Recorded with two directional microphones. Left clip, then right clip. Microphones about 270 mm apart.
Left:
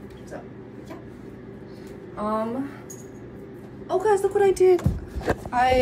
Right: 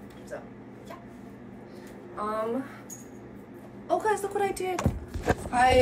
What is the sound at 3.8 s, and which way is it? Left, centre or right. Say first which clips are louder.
Speech: left 5 dB; centre.